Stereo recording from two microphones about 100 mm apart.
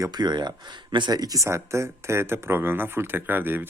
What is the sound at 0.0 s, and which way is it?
Speech, 45° right (ahead or behind).